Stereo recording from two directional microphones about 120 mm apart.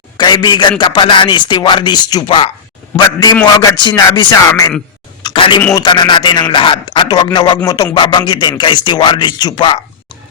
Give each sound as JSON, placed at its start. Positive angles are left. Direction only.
{"t": 0.2, "sound": "speech", "side_deg": 35}
{"t": 2.2, "sound": "speech", "side_deg": 50}
{"t": 3.8, "sound": "speech", "side_deg": 40}
{"t": 4.4, "sound": "speech", "side_deg": 25}
{"t": 5.2, "sound": "a sound", "side_deg": 45}
{"t": 5.7, "sound": "speech", "side_deg": 40}